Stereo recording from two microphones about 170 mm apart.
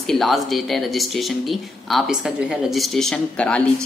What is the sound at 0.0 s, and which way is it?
A woman's voice, centre (ahead or behind).